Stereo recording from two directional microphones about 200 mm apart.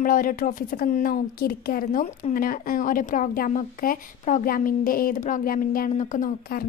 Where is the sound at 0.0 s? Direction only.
45° left (ahead or behind).